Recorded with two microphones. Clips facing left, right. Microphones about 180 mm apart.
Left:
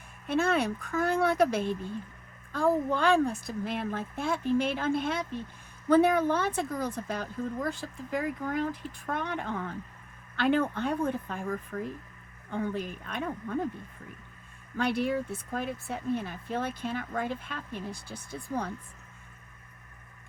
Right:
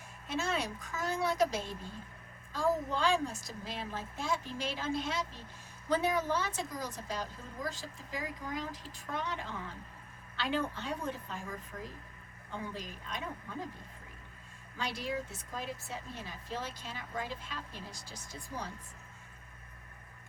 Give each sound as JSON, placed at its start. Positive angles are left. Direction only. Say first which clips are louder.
{"t": 0.3, "sound": "speech", "louder": "left 8 dB", "side_deg": 60}
{"t": 14.8, "sound": "speech", "louder": "left 9 dB", "side_deg": 55}